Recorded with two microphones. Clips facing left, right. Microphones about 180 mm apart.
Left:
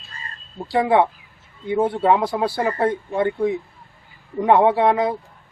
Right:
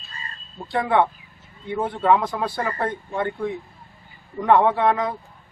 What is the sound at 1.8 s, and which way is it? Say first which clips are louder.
Speech: left 2 dB; 30° left (ahead or behind).